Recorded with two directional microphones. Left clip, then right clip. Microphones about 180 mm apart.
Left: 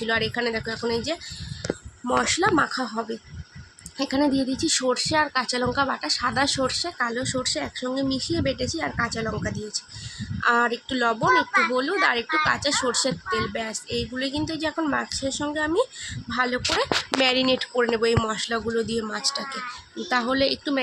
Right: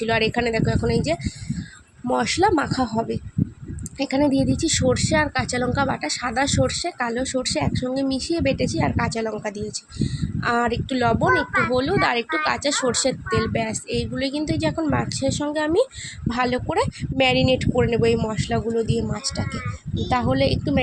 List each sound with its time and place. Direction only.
0.0 s speech: 15° right (ahead or behind)